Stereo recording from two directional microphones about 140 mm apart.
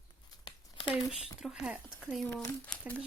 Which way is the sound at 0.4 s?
35° left (ahead or behind).